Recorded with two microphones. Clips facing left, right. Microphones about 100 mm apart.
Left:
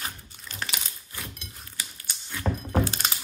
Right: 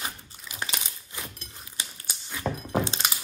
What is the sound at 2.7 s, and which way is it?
Thunk, 25° right (ahead or behind).